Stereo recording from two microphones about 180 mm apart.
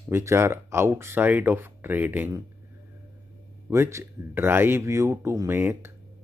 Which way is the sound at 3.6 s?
15° right (ahead or behind).